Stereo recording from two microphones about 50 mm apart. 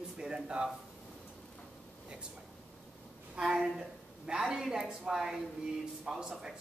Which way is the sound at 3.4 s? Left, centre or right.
Centre.